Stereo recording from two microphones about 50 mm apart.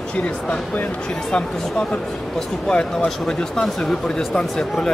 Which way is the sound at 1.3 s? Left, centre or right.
Left.